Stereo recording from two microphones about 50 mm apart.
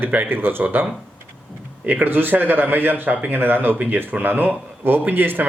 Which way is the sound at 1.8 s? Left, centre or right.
Right.